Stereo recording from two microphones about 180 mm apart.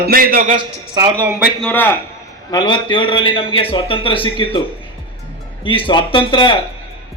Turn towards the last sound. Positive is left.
turn(degrees=25)  # may be behind; listen again after turning